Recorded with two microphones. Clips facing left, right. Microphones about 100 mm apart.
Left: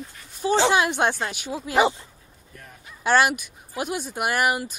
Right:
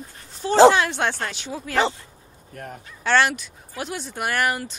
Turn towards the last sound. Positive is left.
turn(degrees=15)  # may be behind; listen again after turning